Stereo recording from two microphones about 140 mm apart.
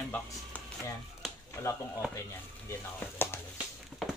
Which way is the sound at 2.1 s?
20° left (ahead or behind).